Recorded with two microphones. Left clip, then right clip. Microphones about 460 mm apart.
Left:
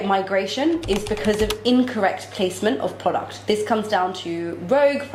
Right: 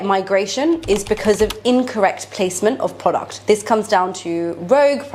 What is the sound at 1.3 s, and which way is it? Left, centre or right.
Speech, centre.